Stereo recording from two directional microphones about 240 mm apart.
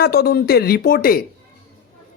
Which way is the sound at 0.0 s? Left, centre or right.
Left.